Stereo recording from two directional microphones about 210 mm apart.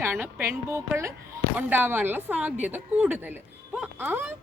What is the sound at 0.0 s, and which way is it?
A woman's voice, 10° right (ahead or behind).